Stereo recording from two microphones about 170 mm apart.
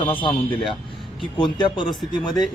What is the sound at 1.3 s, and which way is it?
Speech, 30° left (ahead or behind).